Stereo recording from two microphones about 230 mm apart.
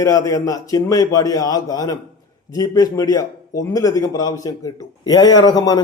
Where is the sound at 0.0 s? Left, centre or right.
Centre.